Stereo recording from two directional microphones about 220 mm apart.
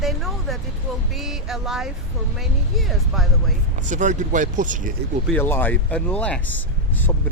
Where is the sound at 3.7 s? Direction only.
35° right (ahead or behind).